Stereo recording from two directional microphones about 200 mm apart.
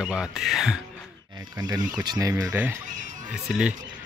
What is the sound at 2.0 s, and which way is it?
Speech, 20° right (ahead or behind).